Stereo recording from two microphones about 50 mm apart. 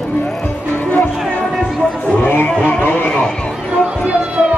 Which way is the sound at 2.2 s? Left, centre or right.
Left.